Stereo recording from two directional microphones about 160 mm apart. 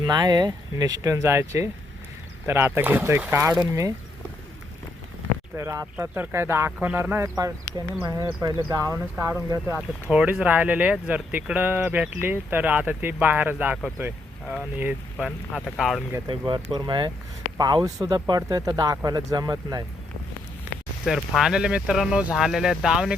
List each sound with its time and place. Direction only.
0.0 s speech: 25° right (ahead or behind)
5.5 s speech: 20° right (ahead or behind)
14.8 s speech: 10° right (ahead or behind)
16.1 s speech: 25° right (ahead or behind)
20.7 s a sound: 10° right (ahead or behind)
21.0 s speech: 5° right (ahead or behind)